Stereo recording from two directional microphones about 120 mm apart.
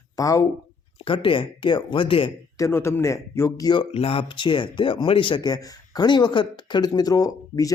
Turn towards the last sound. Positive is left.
turn(degrees=30)  # may be behind; listen again after turning